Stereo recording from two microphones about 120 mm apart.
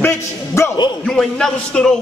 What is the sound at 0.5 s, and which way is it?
Speech, 25° left (ahead or behind).